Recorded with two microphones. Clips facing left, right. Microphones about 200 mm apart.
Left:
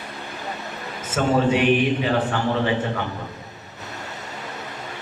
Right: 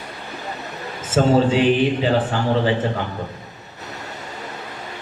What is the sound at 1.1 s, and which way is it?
A man's voice, 30° right (ahead or behind).